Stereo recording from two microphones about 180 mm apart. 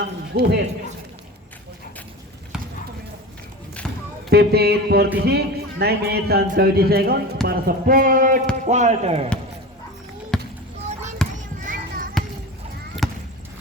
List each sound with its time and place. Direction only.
0.0 s a man's voice: 65° right (ahead or behind)
3.8 s a sound: 5° left (ahead or behind)
4.3 s speech: 60° right (ahead or behind); by 9.3 s 35° right (ahead or behind)
10.3 s basketball bounce: 5° left (ahead or behind)
11.2 s children playing: 5° left (ahead or behind)
11.6 s music: 50° right (ahead or behind)
13.0 s basketball bounce: centre (ahead or behind)